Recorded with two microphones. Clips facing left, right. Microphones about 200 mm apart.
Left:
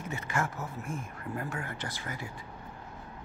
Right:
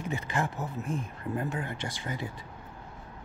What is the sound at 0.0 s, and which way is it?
Speech, 15° right (ahead or behind).